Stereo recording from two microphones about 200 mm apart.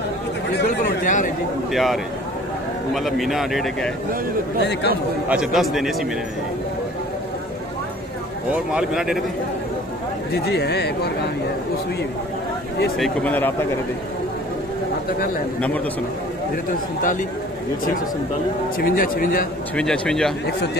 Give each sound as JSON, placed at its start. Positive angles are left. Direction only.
{"t": 1.0, "sound": "speech", "side_deg": 40}
{"t": 1.7, "sound": "speech", "side_deg": 0}
{"t": 4.6, "sound": "speech", "side_deg": 60}
{"t": 5.3, "sound": "speech", "side_deg": 0}
{"t": 8.7, "sound": "speech", "side_deg": -5}
{"t": 10.3, "sound": "speech", "side_deg": 55}
{"t": 12.9, "sound": "speech", "side_deg": 5}
{"t": 18.8, "sound": "a man's voice", "side_deg": 45}
{"t": 19.7, "sound": "speech", "side_deg": 5}